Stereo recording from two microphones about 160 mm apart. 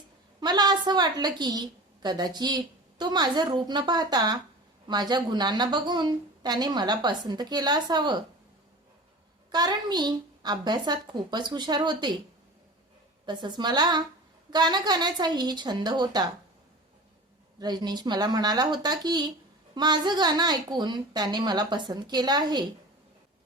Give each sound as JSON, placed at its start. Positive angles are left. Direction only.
{"t": 0.3, "sound": "a woman's voice", "side_deg": -25}
{"t": 9.5, "sound": "a woman's voice", "side_deg": -25}
{"t": 13.2, "sound": "a woman's voice", "side_deg": -25}
{"t": 17.6, "sound": "a woman's voice", "side_deg": -25}